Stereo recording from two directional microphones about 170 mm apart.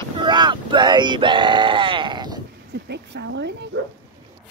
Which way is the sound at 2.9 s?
85° right.